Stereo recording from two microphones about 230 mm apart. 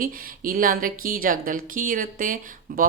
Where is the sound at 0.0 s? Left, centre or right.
Right.